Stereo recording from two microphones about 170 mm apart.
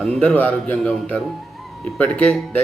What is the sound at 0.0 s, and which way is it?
Speech, 5° left (ahead or behind).